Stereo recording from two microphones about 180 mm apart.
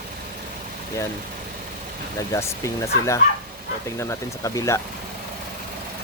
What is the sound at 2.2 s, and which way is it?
Speech, 15° left (ahead or behind).